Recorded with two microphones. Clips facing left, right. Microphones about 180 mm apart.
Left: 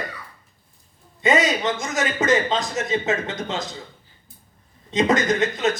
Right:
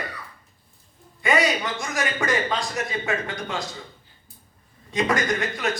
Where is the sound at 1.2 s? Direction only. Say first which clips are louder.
Left 2 dB; 20° left (ahead or behind).